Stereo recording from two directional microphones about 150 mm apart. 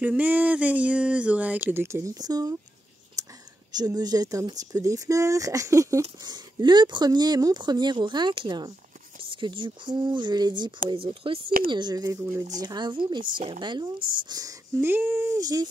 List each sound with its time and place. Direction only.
0.0 s speech: 10° right (ahead or behind)
3.2 s whispering: 20° right (ahead or behind)
3.7 s speech: 25° right (ahead or behind)